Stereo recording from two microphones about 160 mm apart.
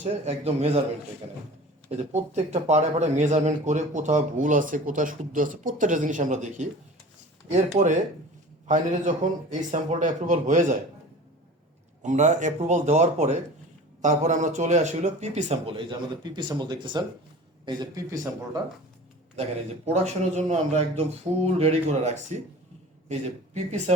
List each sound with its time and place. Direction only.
0.0 s a man's voice: 40° right (ahead or behind)
2.1 s speech: 45° right (ahead or behind)
12.0 s speech: 50° right (ahead or behind)
15.7 s speech: 30° right (ahead or behind)
19.4 s speech: 40° right (ahead or behind)